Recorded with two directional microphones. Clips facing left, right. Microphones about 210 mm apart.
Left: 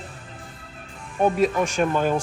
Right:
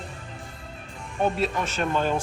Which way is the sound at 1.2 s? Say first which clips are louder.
Left 5 dB; 10° left (ahead or behind).